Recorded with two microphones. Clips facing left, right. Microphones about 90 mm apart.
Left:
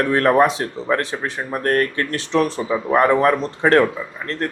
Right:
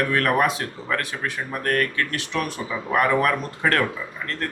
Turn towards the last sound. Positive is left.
turn(degrees=25)  # may be behind; listen again after turning